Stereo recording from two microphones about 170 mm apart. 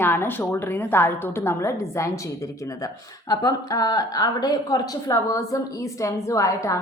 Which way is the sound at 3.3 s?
20° left (ahead or behind).